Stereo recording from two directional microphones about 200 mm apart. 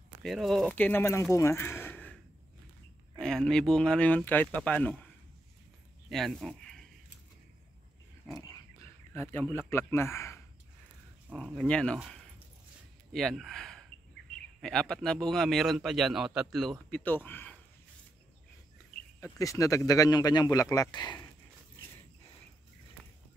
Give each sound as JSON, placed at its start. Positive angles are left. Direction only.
{"t": 0.2, "sound": "a man's voice", "side_deg": 0}
{"t": 1.3, "sound": "a sound", "side_deg": 15}
{"t": 3.2, "sound": "a man's voice", "side_deg": 5}
{"t": 6.0, "sound": "a sound", "side_deg": 0}
{"t": 9.1, "sound": "a man's voice", "side_deg": 10}
{"t": 19.2, "sound": "a man's voice", "side_deg": 15}